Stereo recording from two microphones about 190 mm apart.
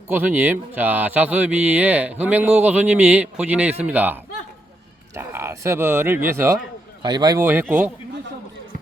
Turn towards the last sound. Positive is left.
turn(degrees=-10)  # may be behind; listen again after turning